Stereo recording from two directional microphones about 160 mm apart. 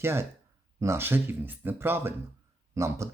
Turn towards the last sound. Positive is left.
turn(degrees=-20)  # may be behind; listen again after turning